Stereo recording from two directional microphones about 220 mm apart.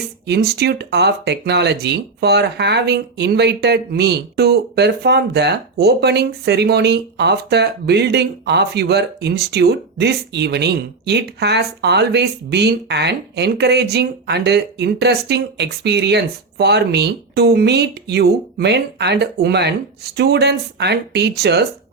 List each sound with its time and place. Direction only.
0.3 s speech: 50° right (ahead or behind)